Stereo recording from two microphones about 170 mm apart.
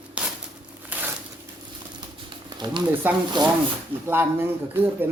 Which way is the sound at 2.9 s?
10° right (ahead or behind).